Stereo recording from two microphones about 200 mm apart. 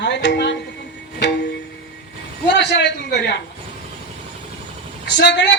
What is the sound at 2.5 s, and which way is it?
Speech, 60° left (ahead or behind).